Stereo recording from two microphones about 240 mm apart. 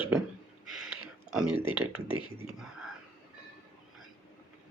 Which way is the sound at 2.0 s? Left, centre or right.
Left.